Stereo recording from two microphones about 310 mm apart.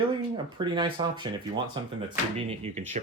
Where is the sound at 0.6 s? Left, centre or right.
Centre.